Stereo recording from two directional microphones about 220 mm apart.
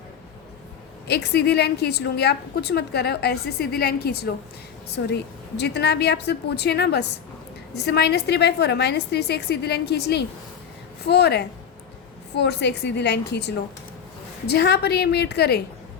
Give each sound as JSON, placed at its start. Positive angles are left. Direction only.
{"t": 1.0, "sound": "a woman's voice", "side_deg": 50}